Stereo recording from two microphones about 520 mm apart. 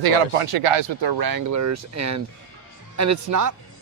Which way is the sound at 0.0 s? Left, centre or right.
Right.